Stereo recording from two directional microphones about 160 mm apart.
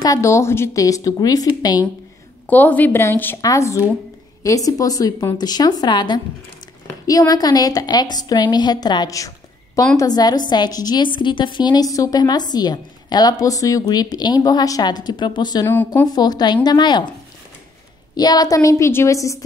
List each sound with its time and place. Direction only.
0.0 s a woman's voice: 20° left (ahead or behind)
2.4 s a woman's voice: 10° left (ahead or behind); by 15.6 s 25° left (ahead or behind)
15.6 s a woman's voice: 10° left (ahead or behind)
16.1 s a woman's voice: 25° left (ahead or behind)
18.1 s a woman's voice: 25° left (ahead or behind)